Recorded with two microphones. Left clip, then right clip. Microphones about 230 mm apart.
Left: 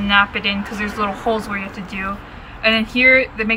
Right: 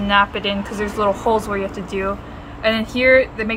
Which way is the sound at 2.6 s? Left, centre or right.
Right.